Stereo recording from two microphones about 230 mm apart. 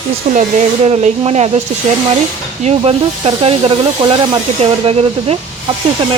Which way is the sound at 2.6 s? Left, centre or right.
Right.